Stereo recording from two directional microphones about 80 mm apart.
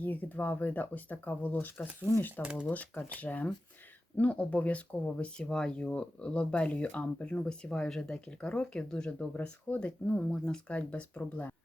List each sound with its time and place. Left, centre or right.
0.0 s speech: left
2.4 s speech: centre
2.6 s speech: left